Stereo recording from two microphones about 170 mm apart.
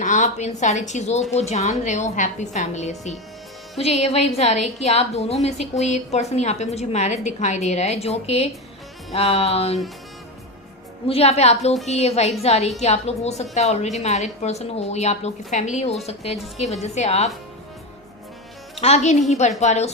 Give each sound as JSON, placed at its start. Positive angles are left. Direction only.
{"t": 0.0, "sound": "a woman's voice", "side_deg": 45}
{"t": 11.1, "sound": "a woman's voice", "side_deg": 35}
{"t": 18.8, "sound": "a woman's voice", "side_deg": 40}